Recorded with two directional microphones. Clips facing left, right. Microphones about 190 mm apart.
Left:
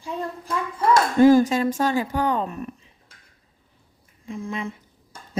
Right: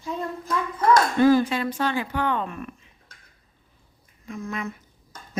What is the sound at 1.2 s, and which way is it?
A woman's voice, 45° left (ahead or behind).